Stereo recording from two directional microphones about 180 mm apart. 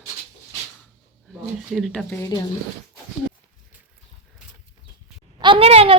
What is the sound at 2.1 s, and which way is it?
Speech, 20° left (ahead or behind).